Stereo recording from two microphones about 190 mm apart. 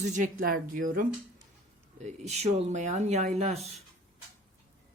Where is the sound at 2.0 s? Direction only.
35° right (ahead or behind).